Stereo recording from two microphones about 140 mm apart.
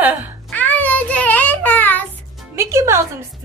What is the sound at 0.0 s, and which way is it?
Speech, 10° right (ahead or behind).